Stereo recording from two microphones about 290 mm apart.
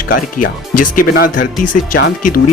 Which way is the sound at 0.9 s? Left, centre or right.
Left.